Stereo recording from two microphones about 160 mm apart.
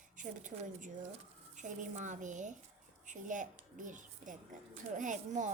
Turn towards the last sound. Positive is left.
turn(degrees=-50)  # may be behind; listen again after turning